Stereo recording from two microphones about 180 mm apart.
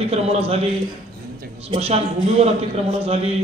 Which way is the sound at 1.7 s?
35° right (ahead or behind).